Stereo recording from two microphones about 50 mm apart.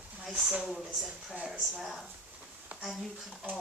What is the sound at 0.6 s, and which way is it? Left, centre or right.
Speech, centre.